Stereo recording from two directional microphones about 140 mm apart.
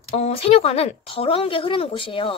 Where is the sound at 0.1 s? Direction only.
45° left (ahead or behind).